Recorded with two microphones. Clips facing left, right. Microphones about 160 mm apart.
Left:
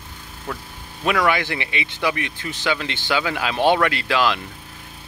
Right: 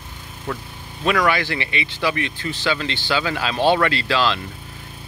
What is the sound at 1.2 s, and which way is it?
Speech, 20° left (ahead or behind).